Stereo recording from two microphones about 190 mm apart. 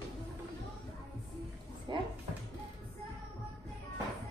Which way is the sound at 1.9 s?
25° right (ahead or behind).